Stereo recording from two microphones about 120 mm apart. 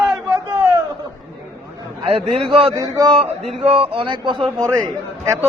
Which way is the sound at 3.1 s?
55° right (ahead or behind).